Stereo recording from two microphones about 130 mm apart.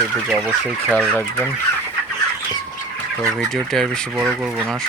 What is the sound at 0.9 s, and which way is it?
Fowl, 5° left (ahead or behind).